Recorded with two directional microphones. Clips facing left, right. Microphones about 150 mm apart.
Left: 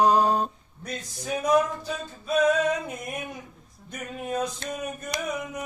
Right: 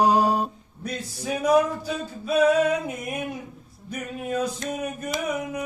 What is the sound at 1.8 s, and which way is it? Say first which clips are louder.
Mantra: right 4 dB; 5° right (ahead or behind).